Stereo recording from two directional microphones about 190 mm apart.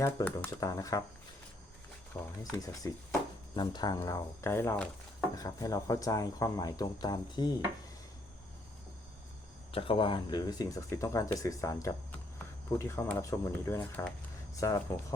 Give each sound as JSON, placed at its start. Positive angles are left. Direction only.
{"t": 0.0, "sound": "speech", "side_deg": 15}
{"t": 2.4, "sound": "speech", "side_deg": 20}
{"t": 9.7, "sound": "speech", "side_deg": 30}